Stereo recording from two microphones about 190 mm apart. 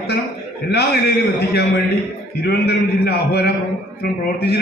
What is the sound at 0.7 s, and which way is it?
A man's voice, 60° left (ahead or behind).